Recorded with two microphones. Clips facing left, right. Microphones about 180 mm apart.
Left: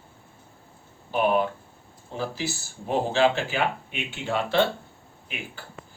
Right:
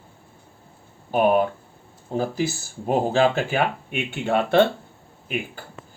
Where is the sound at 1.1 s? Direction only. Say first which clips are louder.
Right 4 dB; 45° right (ahead or behind).